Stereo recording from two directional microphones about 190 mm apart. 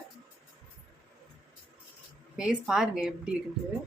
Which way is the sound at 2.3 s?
5° right (ahead or behind).